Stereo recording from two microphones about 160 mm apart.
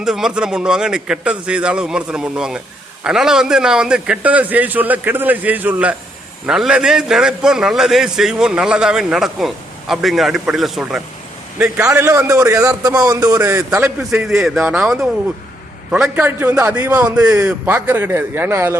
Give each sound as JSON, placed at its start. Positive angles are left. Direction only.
{"t": 0.0, "sound": "a man's voice", "side_deg": -5}